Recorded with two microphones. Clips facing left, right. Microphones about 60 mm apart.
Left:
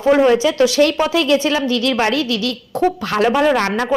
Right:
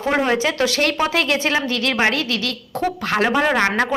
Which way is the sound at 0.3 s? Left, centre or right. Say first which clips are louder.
Left 5 dB; right.